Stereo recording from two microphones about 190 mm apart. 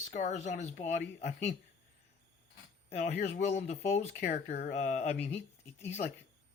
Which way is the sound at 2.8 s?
40° left (ahead or behind).